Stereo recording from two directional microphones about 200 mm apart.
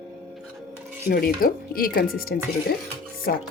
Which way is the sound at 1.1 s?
50° left (ahead or behind).